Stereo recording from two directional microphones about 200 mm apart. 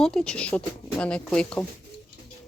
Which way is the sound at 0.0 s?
5° left (ahead or behind).